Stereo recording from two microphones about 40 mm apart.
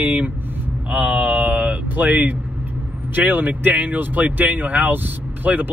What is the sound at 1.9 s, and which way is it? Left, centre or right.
Speech, right.